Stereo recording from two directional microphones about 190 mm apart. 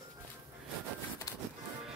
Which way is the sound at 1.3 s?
20° left (ahead or behind).